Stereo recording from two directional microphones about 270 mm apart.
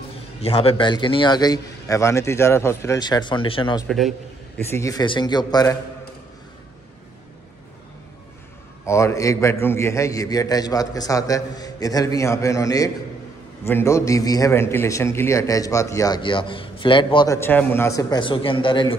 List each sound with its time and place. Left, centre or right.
0.4 s a man's voice: left
3.8 s a man's voice: centre
4.6 s a man's voice: centre
8.8 s a man's voice: centre